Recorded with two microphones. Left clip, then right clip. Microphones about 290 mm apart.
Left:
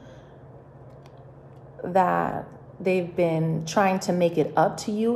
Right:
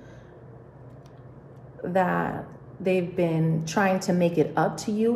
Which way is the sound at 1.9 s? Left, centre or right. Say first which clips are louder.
Left 3 dB; centre.